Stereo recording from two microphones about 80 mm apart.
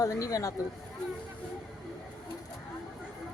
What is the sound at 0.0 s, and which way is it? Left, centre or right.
Speech, left.